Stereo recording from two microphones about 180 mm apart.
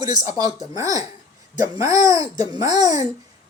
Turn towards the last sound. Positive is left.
turn(degrees=-20)  # may be behind; listen again after turning